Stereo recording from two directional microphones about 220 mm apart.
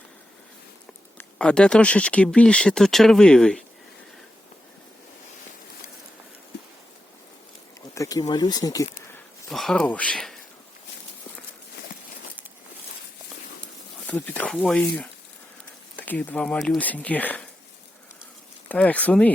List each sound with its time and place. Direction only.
1.2 s speech: 5° left (ahead or behind)
7.9 s a sound: 15° left (ahead or behind)
8.3 s speech: 20° left (ahead or behind)
9.5 s speech: centre (ahead or behind)
14.1 s speech: 5° left (ahead or behind)
18.7 s speech: 5° left (ahead or behind)